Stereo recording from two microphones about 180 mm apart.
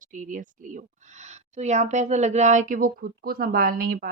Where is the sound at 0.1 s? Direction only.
45° right (ahead or behind).